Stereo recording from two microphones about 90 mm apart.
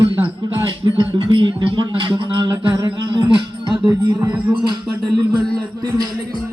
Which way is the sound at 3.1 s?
60° right (ahead or behind).